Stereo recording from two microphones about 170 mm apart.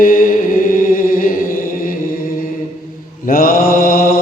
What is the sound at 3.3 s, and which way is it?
Mantra, 55° left (ahead or behind).